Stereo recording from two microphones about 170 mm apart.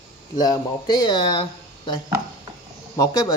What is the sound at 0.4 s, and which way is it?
Speech, 25° left (ahead or behind).